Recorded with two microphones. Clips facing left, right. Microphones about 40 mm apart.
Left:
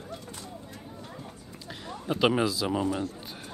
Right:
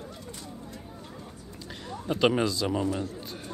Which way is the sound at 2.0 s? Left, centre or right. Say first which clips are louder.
Even; centre.